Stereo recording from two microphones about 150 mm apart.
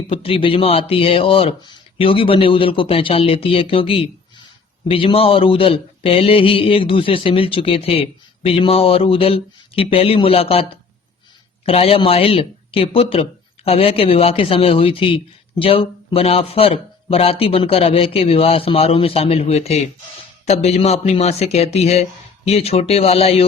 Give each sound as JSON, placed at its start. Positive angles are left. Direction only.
{"t": 0.1, "sound": "speech", "side_deg": 35}